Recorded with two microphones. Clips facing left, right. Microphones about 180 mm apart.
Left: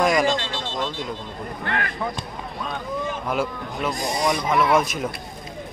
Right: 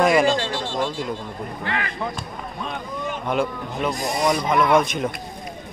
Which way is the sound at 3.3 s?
Centre (ahead or behind).